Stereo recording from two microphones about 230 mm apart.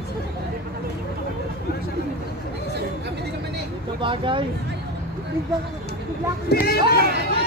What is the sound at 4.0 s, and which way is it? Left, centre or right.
Speech, right.